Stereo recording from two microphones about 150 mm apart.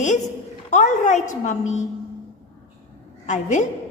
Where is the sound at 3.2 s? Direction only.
55° left (ahead or behind).